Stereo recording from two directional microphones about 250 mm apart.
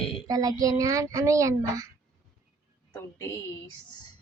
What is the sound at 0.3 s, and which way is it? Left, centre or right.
A child's voice, centre.